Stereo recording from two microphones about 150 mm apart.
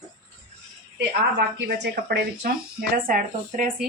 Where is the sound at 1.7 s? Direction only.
90° right; by 3.7 s 65° right (ahead or behind).